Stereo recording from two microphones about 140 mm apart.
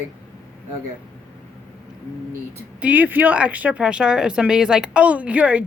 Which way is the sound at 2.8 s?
10° right (ahead or behind).